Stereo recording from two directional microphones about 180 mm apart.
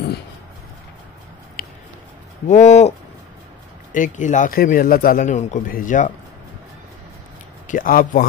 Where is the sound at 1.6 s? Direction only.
55° left (ahead or behind).